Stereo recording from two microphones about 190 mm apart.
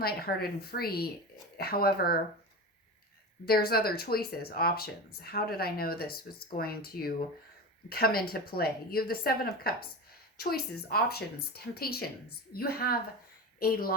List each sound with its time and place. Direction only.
0.0 s speech: 55° left (ahead or behind)
3.4 s speech: 55° left (ahead or behind)